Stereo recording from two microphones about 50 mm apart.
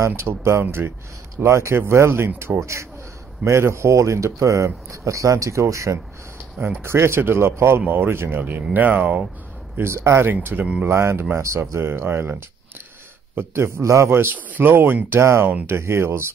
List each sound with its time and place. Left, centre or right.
0.0 s speech: right
1.4 s speech: right
1.8 s speech: right
2.6 s speech: right
6.8 s speech: right
9.8 s speech: right
10.3 s speech: right
10.6 s speech: right
10.9 s speech: right
11.3 s speech: right
11.7 s speech: right
14.3 s speech: right
15.0 s speech: right